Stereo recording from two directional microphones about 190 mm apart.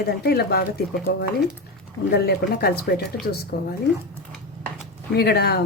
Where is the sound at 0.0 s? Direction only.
55° left (ahead or behind).